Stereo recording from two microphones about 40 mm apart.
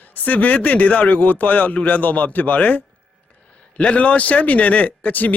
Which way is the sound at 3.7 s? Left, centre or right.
Left.